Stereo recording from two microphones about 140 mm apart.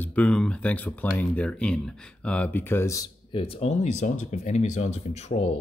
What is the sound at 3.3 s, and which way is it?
Speech, 40° left (ahead or behind).